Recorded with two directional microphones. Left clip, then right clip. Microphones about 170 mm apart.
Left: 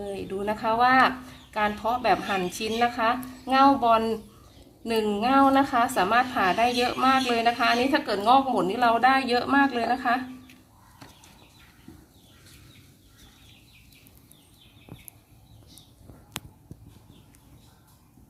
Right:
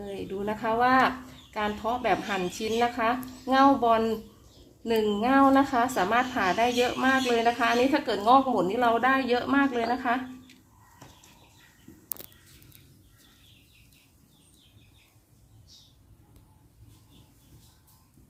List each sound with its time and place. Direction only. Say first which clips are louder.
0.0 s a woman's voice: left 3 dB; 20° right (ahead or behind)